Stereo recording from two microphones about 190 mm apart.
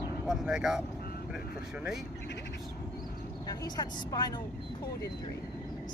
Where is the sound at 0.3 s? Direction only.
5° right (ahead or behind).